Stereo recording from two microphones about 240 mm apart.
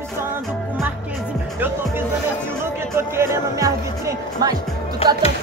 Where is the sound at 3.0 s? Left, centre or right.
Centre.